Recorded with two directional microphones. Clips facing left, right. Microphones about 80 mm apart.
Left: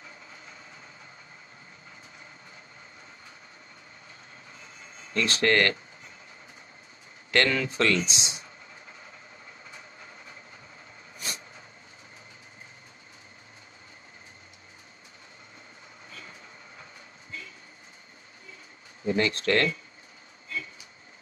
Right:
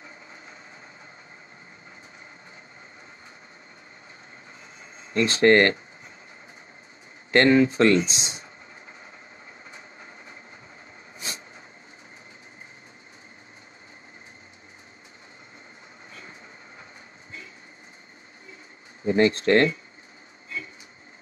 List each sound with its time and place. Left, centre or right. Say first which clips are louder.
5.0 s speech: right 7 dB; right
7.2 s speech: right 8 dB; right
11.1 s a sound: right 1 dB; right
16.1 s vehicle: right 1 dB; right
19.0 s speech: right 6 dB; right